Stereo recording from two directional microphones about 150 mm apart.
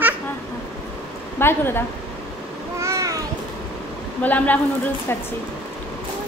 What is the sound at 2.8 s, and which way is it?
Babbling, 20° right (ahead or behind).